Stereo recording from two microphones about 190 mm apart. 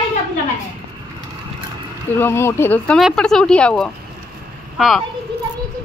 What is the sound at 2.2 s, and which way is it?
A child's voice, 10° left (ahead or behind).